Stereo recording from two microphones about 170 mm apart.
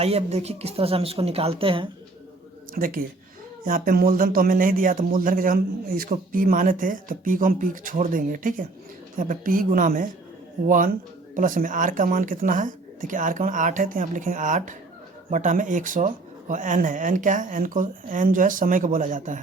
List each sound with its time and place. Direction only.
0.0 s speech: 40° right (ahead or behind)
2.7 s speech: 55° right (ahead or behind)